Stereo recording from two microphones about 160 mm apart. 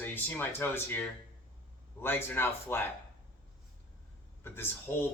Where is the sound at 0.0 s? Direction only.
10° left (ahead or behind).